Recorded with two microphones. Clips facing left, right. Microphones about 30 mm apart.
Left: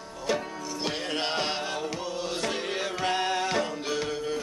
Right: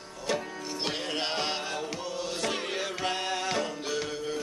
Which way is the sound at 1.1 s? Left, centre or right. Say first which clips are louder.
Left 3 dB; centre.